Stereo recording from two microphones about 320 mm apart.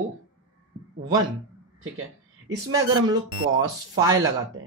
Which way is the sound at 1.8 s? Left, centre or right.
Right.